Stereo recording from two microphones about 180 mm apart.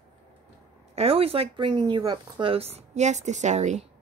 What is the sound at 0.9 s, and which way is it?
Speech, 35° right (ahead or behind).